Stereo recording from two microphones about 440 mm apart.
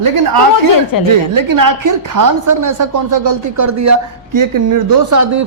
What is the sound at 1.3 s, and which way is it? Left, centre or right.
Speech, right.